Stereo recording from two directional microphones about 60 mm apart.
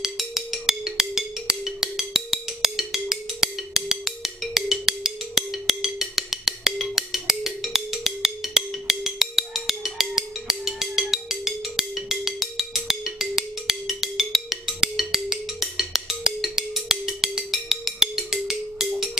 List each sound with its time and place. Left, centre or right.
0.0 s music: centre